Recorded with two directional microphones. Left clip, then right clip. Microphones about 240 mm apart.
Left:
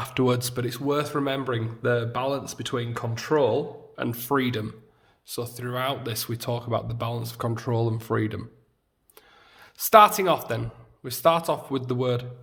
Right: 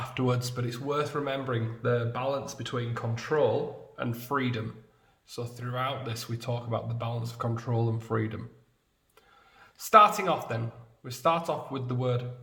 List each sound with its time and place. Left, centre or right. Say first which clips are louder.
0.0 s speech: left 6 dB; left
9.6 s speech: left 4 dB; left